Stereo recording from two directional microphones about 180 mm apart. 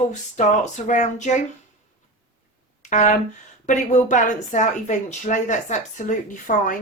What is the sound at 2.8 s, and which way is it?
Speech, 40° left (ahead or behind).